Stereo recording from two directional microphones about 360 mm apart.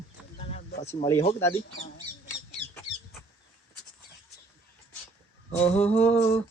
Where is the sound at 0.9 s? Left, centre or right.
Centre.